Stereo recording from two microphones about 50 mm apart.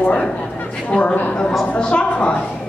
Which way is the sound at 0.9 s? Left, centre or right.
Left.